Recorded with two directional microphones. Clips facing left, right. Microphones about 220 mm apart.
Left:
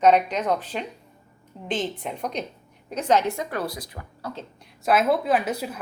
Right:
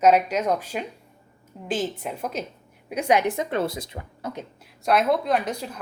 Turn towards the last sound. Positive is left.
turn(degrees=5)  # may be behind; listen again after turning